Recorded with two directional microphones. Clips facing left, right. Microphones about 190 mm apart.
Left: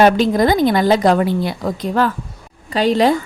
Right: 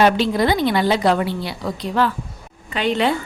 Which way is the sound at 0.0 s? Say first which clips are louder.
Left 4 dB; 45° left (ahead or behind).